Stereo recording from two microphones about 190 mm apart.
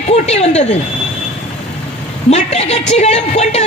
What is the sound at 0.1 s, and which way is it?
Speech, 35° left (ahead or behind).